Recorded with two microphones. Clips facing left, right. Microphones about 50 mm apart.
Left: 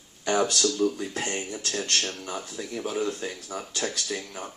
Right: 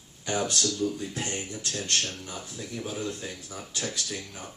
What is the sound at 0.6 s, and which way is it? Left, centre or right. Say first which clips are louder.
Speech: left 4 dB; left.